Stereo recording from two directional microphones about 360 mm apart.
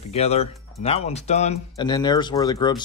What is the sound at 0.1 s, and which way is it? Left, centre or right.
Speech, centre.